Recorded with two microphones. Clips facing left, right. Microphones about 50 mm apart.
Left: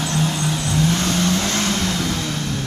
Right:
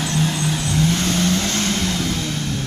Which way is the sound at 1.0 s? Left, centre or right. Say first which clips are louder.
Even; centre.